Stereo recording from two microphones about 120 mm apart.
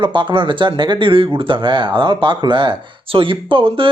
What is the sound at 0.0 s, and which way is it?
Speech, 40° right (ahead or behind).